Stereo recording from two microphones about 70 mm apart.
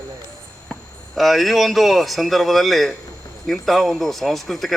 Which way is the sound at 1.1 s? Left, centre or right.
Centre.